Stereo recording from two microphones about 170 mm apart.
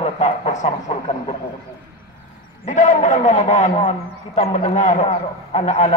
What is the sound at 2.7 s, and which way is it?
A man's voice, 45° left (ahead or behind).